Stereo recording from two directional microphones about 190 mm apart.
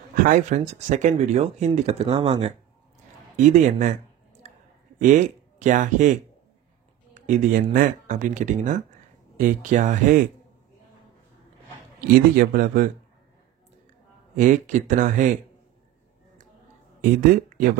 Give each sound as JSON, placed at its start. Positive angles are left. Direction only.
{"t": 0.1, "sound": "speech", "side_deg": -45}
{"t": 5.0, "sound": "speech", "side_deg": -40}
{"t": 7.2, "sound": "speech", "side_deg": -45}
{"t": 12.1, "sound": "speech", "side_deg": -50}
{"t": 14.3, "sound": "speech", "side_deg": -40}
{"t": 17.0, "sound": "speech", "side_deg": -45}